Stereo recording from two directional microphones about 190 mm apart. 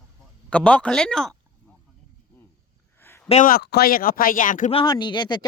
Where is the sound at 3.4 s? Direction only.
50° left (ahead or behind).